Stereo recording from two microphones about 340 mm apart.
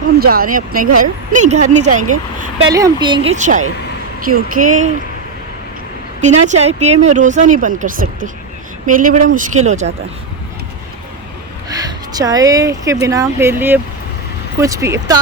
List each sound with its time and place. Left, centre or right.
0.2 s speech: right
2.6 s speech: centre
6.2 s speech: centre
12.1 s speech: centre